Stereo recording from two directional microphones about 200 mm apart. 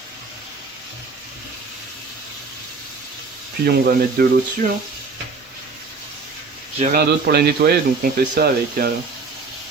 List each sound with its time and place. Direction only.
3.7 s speech: 45° right (ahead or behind)
6.9 s speech: 50° right (ahead or behind)